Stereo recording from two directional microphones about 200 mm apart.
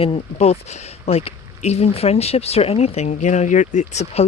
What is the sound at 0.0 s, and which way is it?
Speech, 30° left (ahead or behind).